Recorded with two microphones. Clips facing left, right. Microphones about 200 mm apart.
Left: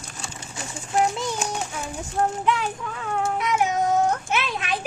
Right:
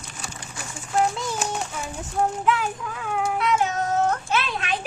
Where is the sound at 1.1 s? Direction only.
Centre (ahead or behind).